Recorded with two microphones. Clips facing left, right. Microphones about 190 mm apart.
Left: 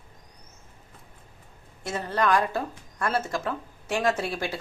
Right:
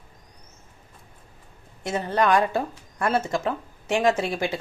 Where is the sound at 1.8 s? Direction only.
20° right (ahead or behind).